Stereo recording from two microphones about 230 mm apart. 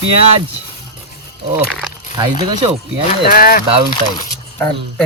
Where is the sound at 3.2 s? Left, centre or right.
Left.